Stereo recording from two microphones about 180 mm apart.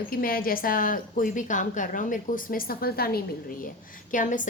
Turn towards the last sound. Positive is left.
turn(degrees=45)  # may be behind; listen again after turning